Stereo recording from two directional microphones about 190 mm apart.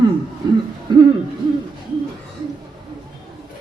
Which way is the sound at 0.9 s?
25° right (ahead or behind).